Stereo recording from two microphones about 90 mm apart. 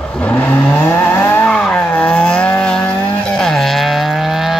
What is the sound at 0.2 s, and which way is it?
Vehicle, 20° left (ahead or behind).